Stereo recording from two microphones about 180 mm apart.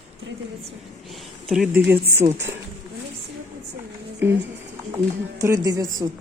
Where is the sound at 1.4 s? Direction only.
5° right (ahead or behind).